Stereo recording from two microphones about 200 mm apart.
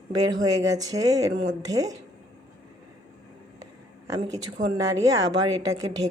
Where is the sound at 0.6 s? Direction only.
15° right (ahead or behind).